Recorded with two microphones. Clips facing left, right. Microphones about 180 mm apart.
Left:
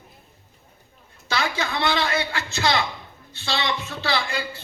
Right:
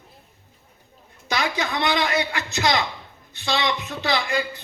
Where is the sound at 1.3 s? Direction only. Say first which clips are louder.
Right 1 dB; 15° right (ahead or behind).